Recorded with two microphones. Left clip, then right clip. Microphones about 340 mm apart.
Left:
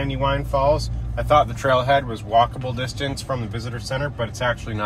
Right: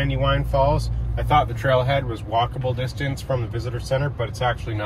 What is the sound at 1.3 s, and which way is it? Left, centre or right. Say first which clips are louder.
Speech: left 2 dB; centre.